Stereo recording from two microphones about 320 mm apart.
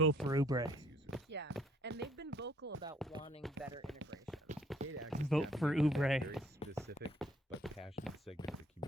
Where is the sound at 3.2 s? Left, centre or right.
Centre.